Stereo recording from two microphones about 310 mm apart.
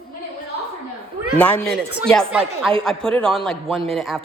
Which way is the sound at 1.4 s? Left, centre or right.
Centre.